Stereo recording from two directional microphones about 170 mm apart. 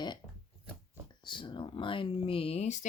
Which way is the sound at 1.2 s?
25° left (ahead or behind).